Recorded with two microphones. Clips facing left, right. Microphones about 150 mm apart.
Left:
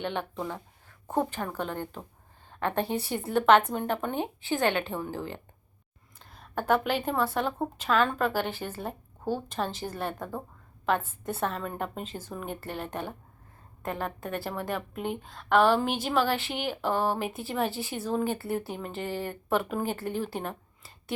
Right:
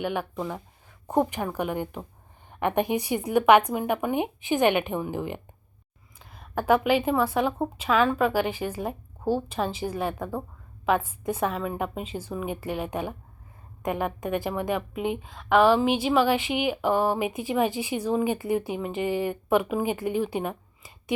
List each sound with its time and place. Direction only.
0.0 s a woman's voice: 10° right (ahead or behind)